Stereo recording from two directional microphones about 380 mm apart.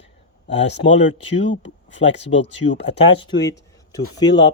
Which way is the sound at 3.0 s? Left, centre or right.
Centre.